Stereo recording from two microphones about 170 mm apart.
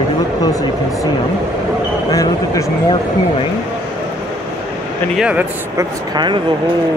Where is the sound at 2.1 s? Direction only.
20° left (ahead or behind).